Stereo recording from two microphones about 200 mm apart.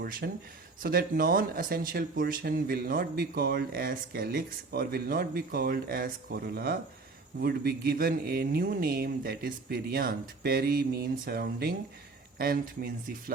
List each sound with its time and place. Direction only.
0.0 s speech: 50° right (ahead or behind)